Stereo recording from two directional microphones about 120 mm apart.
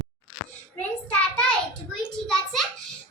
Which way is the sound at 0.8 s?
15° left (ahead or behind).